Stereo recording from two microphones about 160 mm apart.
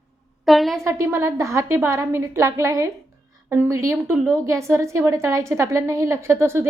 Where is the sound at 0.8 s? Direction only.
15° right (ahead or behind).